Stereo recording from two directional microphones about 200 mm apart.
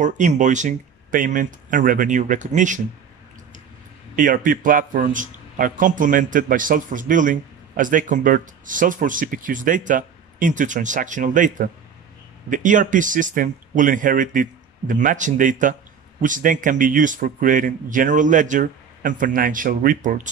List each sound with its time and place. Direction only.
0.0 s a man's voice: 40° right (ahead or behind)
4.1 s a man's voice: 40° right (ahead or behind)